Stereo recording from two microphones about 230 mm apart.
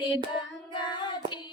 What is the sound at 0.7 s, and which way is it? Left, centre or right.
Child singing, centre.